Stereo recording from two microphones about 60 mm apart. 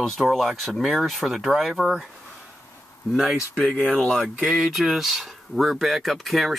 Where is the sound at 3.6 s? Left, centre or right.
Centre.